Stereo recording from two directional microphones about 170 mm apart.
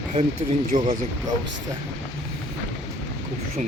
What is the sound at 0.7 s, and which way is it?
Speech, 50° right (ahead or behind).